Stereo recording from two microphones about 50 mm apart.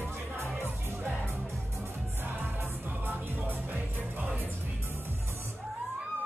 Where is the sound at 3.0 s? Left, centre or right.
Right.